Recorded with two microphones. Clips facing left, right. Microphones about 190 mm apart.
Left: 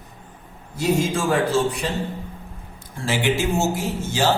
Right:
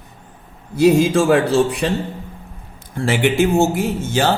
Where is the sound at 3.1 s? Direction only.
60° right (ahead or behind).